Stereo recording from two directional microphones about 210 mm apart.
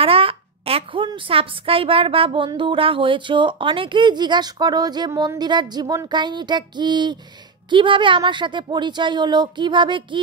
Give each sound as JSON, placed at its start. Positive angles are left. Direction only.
{"t": 0.0, "sound": "a woman's voice", "side_deg": -25}